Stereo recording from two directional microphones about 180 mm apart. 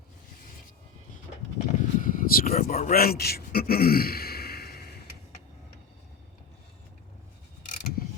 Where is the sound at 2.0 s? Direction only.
50° left (ahead or behind).